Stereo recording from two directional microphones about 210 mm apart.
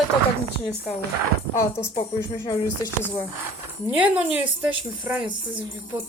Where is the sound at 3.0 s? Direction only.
10° left (ahead or behind).